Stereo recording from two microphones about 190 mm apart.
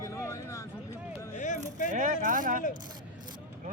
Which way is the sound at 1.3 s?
40° left (ahead or behind).